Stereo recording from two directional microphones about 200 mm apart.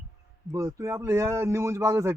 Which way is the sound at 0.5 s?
15° right (ahead or behind).